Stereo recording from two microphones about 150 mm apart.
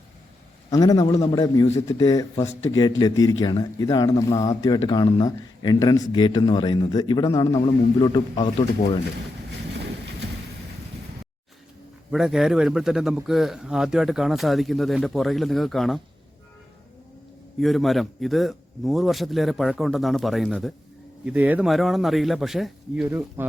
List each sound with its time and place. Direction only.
0.7 s a man's voice: 25° left (ahead or behind)
12.1 s a man's voice: centre (ahead or behind)
17.6 s a man's voice: centre (ahead or behind)
21.7 s a man's voice: centre (ahead or behind)